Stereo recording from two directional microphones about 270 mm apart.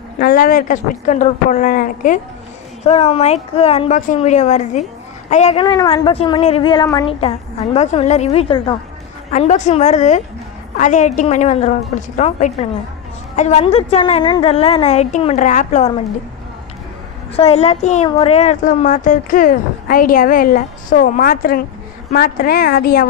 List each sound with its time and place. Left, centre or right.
0.2 s a woman's voice: left
17.4 s a woman's voice: left